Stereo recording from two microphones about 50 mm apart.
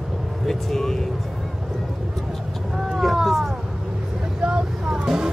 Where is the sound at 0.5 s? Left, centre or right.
Centre.